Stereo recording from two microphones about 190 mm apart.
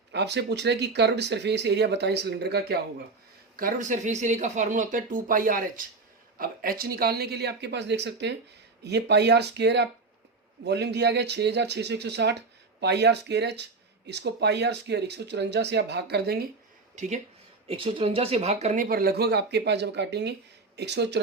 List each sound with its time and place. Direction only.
0.1 s speech: 65° right (ahead or behind)
3.6 s speech: 45° right (ahead or behind)
16.9 s speech: 40° right (ahead or behind)
17.7 s speech: 25° right (ahead or behind); by 21.2 s 65° right (ahead or behind)